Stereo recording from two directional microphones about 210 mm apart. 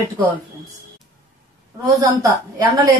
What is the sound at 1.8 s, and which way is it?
A woman's voice, 15° right (ahead or behind).